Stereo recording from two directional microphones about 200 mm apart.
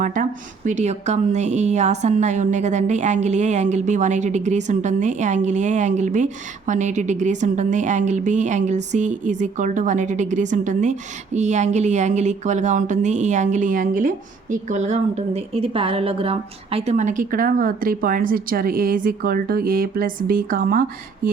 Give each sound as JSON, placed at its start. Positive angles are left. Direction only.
{"t": 0.0, "sound": "a woman's voice", "side_deg": -40}